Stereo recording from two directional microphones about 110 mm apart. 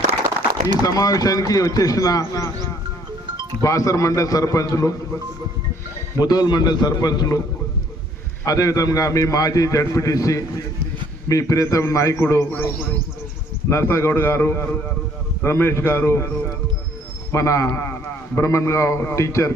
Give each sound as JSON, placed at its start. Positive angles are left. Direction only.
{"t": 0.8, "sound": "speech", "side_deg": 35}
{"t": 6.1, "sound": "speech", "side_deg": 40}
{"t": 8.4, "sound": "a man's voice", "side_deg": 35}
{"t": 17.3, "sound": "a man's voice", "side_deg": 30}